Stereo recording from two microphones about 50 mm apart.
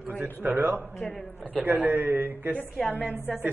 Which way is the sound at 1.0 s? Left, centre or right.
Left.